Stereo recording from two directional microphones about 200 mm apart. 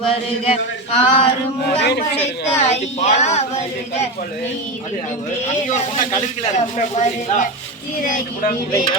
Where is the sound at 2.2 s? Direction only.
35° left (ahead or behind).